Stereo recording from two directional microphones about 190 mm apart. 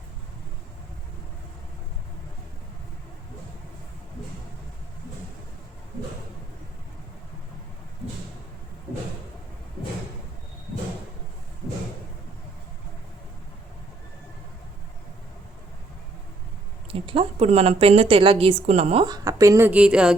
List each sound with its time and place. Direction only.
16.9 s a woman's voice: 30° right (ahead or behind)
19.0 s a woman's voice: 20° right (ahead or behind)